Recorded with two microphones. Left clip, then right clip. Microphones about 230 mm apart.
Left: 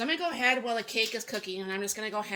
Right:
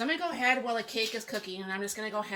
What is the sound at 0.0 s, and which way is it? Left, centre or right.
Speech, left.